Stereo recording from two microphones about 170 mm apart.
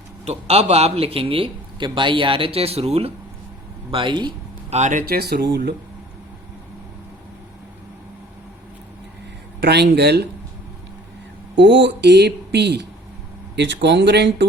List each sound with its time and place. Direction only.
0.3 s a man's voice: 40° right (ahead or behind)
4.7 s speech: 45° right (ahead or behind)
5.0 s speech: 65° right (ahead or behind); by 5.7 s 85° right
9.6 s speech: 80° right
11.5 s speech: 90° right